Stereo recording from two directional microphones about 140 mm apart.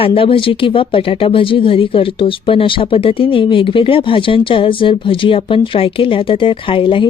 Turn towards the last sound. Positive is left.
turn(degrees=35)  # may be behind; listen again after turning